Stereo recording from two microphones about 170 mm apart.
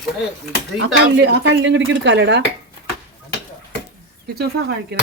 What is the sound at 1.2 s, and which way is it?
Speech, 90° right.